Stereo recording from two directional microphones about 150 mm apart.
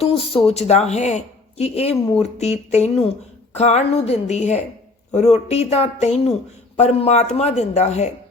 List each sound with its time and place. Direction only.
0.0 s speech: 40° left (ahead or behind)